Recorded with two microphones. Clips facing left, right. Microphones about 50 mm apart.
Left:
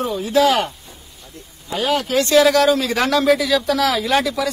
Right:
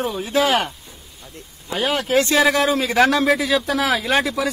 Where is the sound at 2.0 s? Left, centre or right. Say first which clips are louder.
Left 2 dB; right.